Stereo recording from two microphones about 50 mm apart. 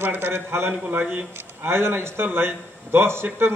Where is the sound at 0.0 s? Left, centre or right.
Right.